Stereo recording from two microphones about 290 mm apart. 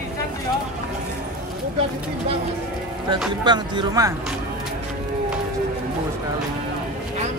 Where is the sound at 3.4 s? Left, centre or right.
Centre.